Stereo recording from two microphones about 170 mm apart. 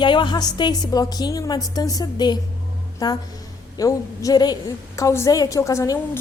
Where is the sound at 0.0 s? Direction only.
25° left (ahead or behind).